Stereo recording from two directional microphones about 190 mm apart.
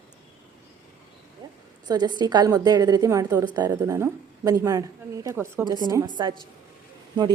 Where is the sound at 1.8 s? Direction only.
20° right (ahead or behind).